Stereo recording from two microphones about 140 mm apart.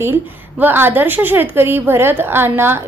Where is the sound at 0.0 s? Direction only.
15° right (ahead or behind).